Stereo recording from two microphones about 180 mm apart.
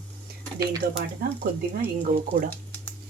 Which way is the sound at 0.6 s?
20° right (ahead or behind).